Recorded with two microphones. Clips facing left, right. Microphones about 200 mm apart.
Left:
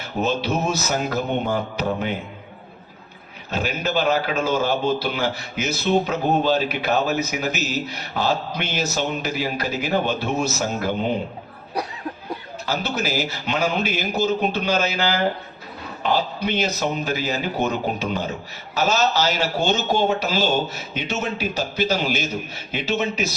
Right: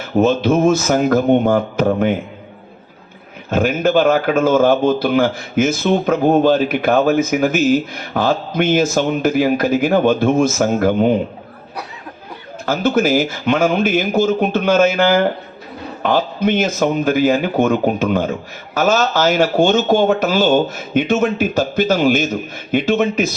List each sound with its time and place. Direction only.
0.0 s speech: 50° right (ahead or behind)
3.5 s speech: 50° right (ahead or behind)
12.6 s speech: 50° right (ahead or behind)